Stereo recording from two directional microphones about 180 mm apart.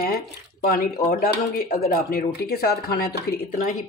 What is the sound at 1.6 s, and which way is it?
Speech, 55° left (ahead or behind).